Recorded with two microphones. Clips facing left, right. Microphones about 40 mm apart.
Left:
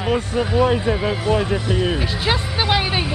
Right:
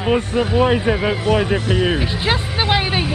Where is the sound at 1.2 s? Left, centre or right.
Right.